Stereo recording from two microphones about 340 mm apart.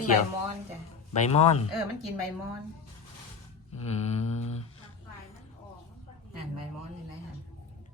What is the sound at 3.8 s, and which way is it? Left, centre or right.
Speech, centre.